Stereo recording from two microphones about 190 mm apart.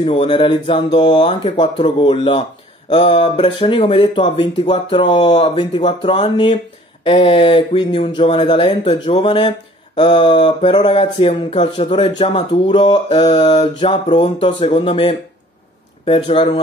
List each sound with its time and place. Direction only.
0.0 s speech: 25° left (ahead or behind)